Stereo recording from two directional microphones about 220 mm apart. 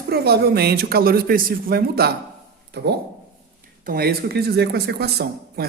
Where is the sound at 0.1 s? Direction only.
45° right (ahead or behind).